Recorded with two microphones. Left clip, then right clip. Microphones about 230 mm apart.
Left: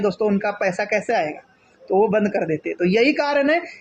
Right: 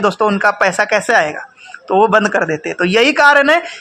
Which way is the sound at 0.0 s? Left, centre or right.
Right.